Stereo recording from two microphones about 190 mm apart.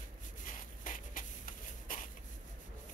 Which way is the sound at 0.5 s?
45° left (ahead or behind).